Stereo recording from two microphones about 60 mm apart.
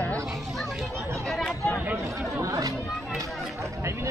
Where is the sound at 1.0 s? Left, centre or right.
Right.